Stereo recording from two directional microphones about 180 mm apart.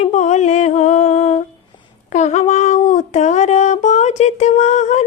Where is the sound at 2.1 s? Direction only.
40° left (ahead or behind).